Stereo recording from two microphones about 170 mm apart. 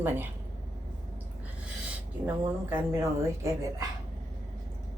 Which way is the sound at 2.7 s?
15° right (ahead or behind).